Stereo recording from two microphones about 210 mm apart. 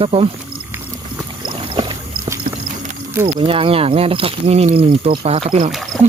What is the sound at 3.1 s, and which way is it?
Speech, 25° right (ahead or behind).